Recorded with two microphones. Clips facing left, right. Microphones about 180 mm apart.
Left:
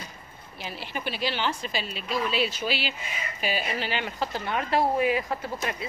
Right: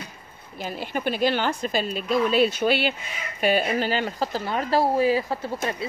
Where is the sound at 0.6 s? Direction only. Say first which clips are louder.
Right 6 dB; 45° right (ahead or behind).